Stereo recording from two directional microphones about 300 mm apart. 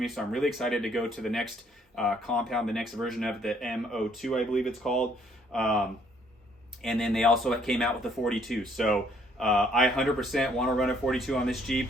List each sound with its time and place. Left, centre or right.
0.0 s speech: centre
6.8 s speech: centre